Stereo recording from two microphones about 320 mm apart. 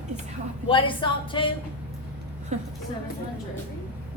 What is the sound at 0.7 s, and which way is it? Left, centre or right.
Speech, centre.